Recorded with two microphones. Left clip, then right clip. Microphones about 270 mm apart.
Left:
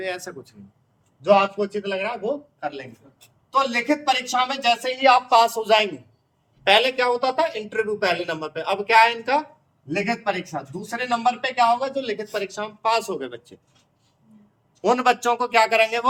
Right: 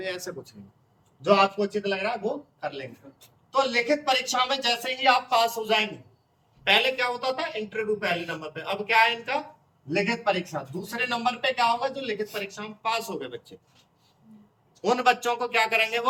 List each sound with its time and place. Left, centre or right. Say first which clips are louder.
0.0 s a man's voice: left 3 dB; centre
14.8 s a man's voice: left 3 dB; centre